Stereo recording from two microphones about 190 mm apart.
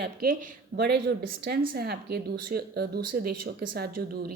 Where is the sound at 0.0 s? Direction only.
50° right (ahead or behind).